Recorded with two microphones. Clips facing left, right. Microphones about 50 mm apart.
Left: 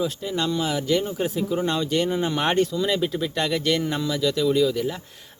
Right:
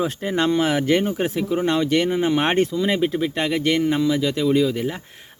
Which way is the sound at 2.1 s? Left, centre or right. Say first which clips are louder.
Right 3 dB; right.